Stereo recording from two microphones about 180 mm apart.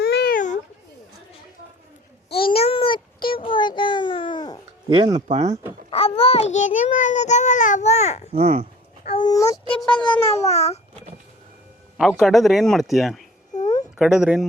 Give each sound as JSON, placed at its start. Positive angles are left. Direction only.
{"t": 0.0, "sound": "a sound", "side_deg": 60}
{"t": 2.3, "sound": "a sound", "side_deg": 30}
{"t": 3.2, "sound": "babbling", "side_deg": 30}
{"t": 4.9, "sound": "speech", "side_deg": -25}
{"t": 5.3, "sound": "speech", "side_deg": -40}
{"t": 5.9, "sound": "a child's voice", "side_deg": 30}
{"t": 9.0, "sound": "speech", "side_deg": 25}
{"t": 9.6, "sound": "speech", "side_deg": 5}
{"t": 10.4, "sound": "babbling", "side_deg": 35}
{"t": 11.9, "sound": "speech", "side_deg": 0}